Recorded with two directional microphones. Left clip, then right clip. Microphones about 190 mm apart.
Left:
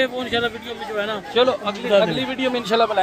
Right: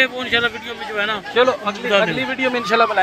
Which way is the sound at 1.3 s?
15° right (ahead or behind).